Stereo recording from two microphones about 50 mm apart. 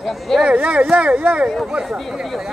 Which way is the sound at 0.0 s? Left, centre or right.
Centre.